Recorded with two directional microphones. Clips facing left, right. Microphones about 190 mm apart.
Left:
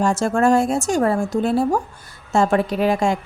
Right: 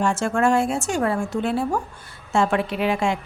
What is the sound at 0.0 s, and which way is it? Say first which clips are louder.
A woman's voice: left 3 dB; 40° left (ahead or behind).